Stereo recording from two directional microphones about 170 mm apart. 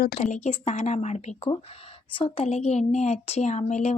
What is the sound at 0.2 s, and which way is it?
Speech, 45° left (ahead or behind).